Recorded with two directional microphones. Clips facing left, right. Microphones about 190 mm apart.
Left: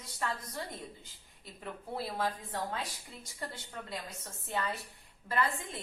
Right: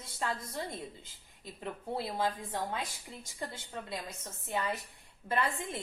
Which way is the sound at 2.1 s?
15° right (ahead or behind).